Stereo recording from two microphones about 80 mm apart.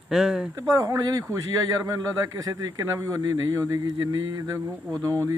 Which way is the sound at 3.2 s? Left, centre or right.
Right.